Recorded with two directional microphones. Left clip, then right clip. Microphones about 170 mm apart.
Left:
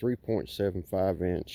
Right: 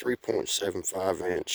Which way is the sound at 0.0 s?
55° right (ahead or behind).